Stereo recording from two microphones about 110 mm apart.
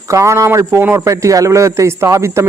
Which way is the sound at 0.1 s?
25° right (ahead or behind).